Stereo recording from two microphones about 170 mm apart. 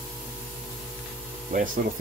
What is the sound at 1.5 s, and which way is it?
Speech, 45° right (ahead or behind).